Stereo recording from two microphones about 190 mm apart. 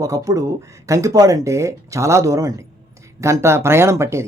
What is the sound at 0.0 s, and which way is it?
Speech, 15° right (ahead or behind).